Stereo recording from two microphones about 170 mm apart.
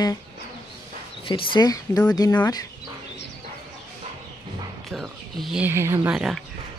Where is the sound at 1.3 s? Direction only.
25° left (ahead or behind).